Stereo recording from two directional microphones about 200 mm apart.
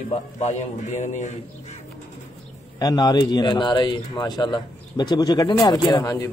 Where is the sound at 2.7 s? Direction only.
20° left (ahead or behind).